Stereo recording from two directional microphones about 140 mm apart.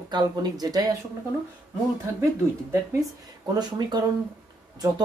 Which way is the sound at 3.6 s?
30° right (ahead or behind).